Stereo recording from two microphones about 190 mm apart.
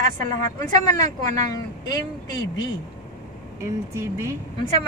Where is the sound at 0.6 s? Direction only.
15° left (ahead or behind).